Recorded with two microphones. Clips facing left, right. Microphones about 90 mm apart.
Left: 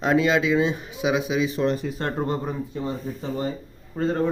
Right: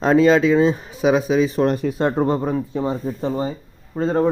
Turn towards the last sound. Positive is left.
turn(degrees=-35)  # may be behind; listen again after turning